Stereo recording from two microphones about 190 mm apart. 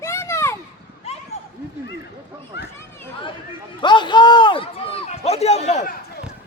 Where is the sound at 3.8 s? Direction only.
25° left (ahead or behind); by 6.2 s 45° left (ahead or behind).